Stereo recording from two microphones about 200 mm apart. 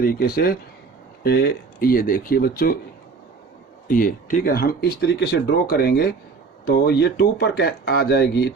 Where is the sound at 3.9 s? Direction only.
45° left (ahead or behind).